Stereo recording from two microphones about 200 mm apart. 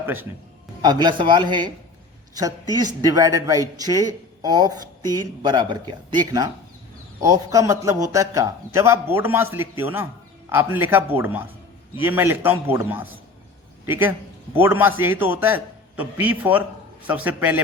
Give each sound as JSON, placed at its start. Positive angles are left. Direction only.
{"t": 0.0, "sound": "a man's voice", "side_deg": -10}
{"t": 0.8, "sound": "a man's voice", "side_deg": -20}